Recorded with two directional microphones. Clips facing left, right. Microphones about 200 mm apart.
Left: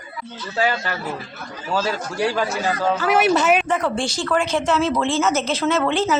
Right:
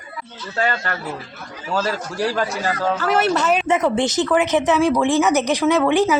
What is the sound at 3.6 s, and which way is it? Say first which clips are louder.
Speech: right 4 dB; 20° right (ahead or behind).